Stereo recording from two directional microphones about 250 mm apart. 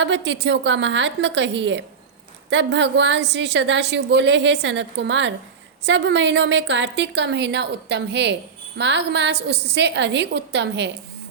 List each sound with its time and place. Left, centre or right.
0.0 s a woman's voice: right